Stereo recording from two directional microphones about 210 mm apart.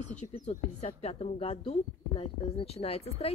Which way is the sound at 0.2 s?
30° left (ahead or behind).